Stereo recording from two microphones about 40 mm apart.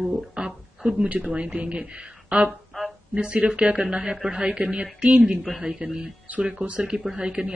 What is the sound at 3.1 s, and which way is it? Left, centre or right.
Speech, right.